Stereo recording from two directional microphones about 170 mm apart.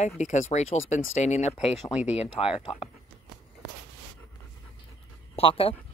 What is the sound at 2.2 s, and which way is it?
Speech, 35° left (ahead or behind).